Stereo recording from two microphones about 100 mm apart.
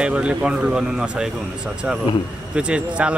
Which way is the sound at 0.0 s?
10° right (ahead or behind).